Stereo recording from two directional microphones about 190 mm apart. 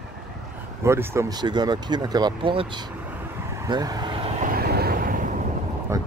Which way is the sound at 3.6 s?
20° right (ahead or behind).